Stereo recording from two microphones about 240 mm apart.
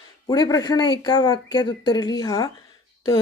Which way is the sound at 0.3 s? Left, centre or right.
Centre.